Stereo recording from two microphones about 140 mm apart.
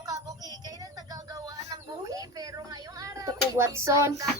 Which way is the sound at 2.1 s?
25° right (ahead or behind).